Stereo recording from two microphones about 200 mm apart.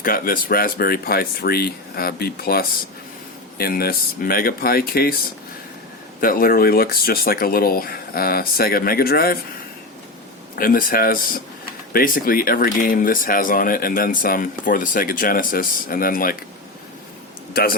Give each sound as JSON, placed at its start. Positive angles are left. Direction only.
{"t": 0.0, "sound": "speech", "side_deg": 45}
{"t": 6.1, "sound": "speech", "side_deg": 45}
{"t": 10.5, "sound": "speech", "side_deg": 45}
{"t": 17.5, "sound": "speech", "side_deg": 50}